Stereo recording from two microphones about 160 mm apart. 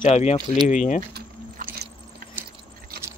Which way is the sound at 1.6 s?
60° right (ahead or behind).